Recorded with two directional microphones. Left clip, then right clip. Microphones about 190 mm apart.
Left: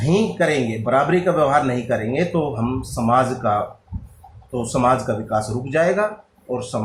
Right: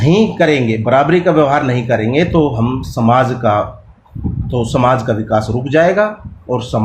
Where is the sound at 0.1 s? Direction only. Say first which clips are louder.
Right 6 dB; 40° right (ahead or behind).